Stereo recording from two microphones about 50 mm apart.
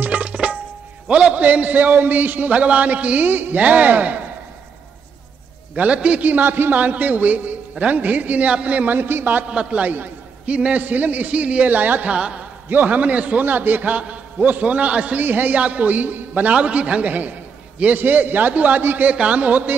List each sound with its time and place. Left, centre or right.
0.0 s tabla: right
1.0 s a man's voice: right
5.8 s speech: right
6.2 s a man's voice: right
9.5 s a man's voice: right
12.1 s speech: centre
12.6 s a man's voice: right
15.1 s a man's voice: right
18.8 s speech: right
19.1 s a man's voice: right